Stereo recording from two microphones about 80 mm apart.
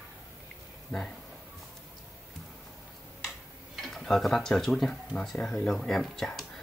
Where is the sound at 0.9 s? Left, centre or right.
Centre.